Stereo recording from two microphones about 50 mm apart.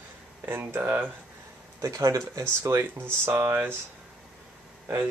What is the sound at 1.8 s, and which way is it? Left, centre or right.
Speech, right.